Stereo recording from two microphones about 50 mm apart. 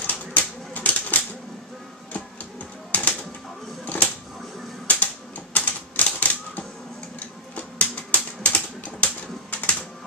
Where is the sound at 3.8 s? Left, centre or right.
Left.